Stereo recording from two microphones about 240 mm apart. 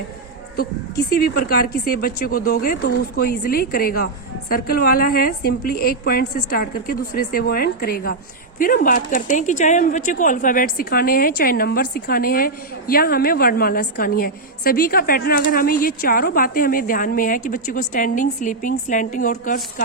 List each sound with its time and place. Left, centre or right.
0.6 s speech: left